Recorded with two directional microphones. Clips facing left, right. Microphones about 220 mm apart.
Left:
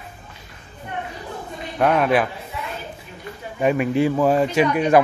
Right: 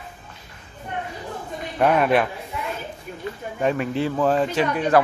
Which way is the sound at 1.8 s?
Centre (ahead or behind).